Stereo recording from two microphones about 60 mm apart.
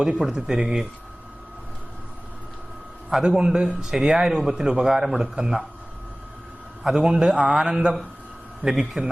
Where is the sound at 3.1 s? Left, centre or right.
Centre.